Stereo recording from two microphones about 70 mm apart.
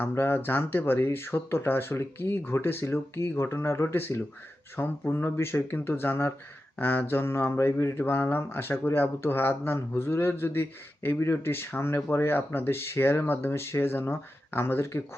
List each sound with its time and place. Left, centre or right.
0.0 s speech: left